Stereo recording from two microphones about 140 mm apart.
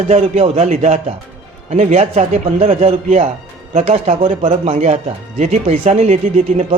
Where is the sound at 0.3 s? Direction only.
45° right (ahead or behind).